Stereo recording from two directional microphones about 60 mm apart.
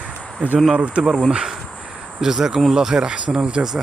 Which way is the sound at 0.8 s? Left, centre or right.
Centre.